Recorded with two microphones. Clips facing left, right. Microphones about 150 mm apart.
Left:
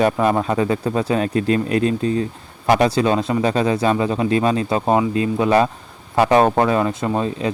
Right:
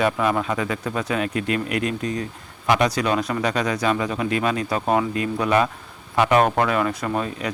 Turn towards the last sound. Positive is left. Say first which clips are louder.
# left 4 dB
turn(degrees=25)  # may be behind; listen again after turning